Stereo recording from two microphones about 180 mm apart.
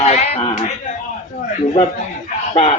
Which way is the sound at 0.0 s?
40° left (ahead or behind).